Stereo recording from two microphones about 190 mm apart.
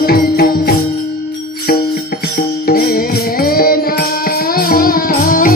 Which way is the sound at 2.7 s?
55° left (ahead or behind).